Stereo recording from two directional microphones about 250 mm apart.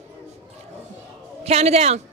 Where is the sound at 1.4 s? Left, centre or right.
Right.